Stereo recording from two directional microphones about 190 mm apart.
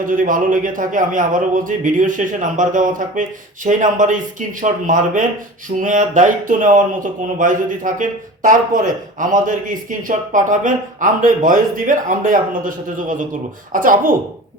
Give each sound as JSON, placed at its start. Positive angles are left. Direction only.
{"t": 0.0, "sound": "speech", "side_deg": -45}